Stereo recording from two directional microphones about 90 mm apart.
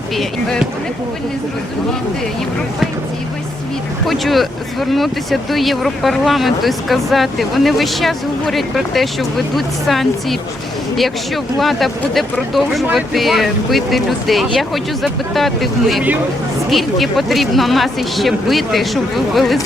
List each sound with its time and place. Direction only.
0.2 s speech: 5° left (ahead or behind)
4.0 s speech: centre (ahead or behind)
11.6 s speech: centre (ahead or behind)